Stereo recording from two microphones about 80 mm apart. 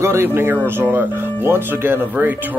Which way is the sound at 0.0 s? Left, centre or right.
Right.